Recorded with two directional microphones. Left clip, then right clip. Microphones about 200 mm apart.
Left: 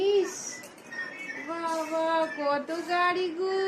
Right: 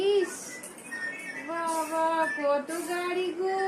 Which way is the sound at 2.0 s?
35° left (ahead or behind).